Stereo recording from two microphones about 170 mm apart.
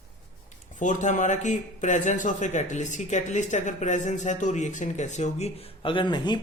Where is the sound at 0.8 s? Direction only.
45° left (ahead or behind).